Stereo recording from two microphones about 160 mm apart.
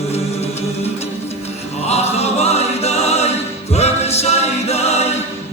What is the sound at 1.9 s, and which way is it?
Music, 40° left (ahead or behind).